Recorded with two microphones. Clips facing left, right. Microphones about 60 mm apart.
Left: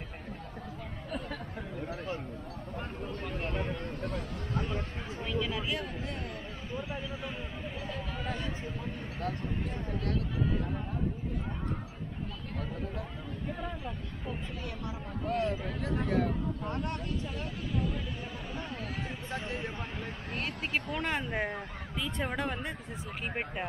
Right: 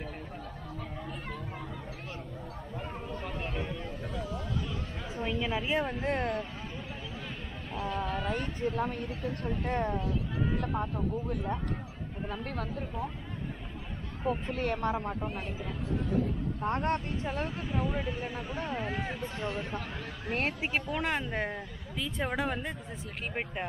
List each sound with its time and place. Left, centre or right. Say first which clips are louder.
3.3 s a sound: left 2 dB; centre
3.7 s a sound: left 1 dB; left
5.1 s speech: right 2 dB; right
8.6 s speech: right 8 dB; right
14.2 s speech: right 10 dB; right
15.2 s speech: left 6 dB; left
16.6 s speech: right 5 dB; right
19.2 s speech: right 2 dB; left
20.2 s speech: right 7 dB; right
20.9 s a woman's voice: right 1 dB; centre